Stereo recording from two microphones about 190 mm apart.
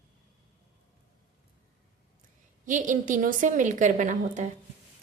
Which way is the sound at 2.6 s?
40° right (ahead or behind).